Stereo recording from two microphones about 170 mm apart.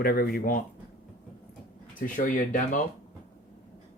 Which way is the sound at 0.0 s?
60° left (ahead or behind).